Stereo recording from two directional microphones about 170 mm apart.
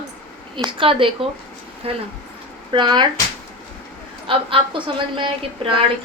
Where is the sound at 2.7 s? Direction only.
25° right (ahead or behind).